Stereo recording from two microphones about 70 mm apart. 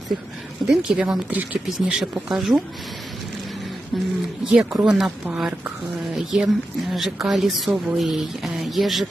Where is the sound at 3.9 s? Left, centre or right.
Centre.